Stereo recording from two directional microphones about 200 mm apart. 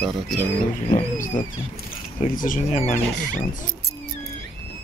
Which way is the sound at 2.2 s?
40° left (ahead or behind).